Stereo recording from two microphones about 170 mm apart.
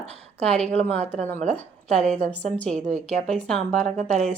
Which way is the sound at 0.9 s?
40° right (ahead or behind).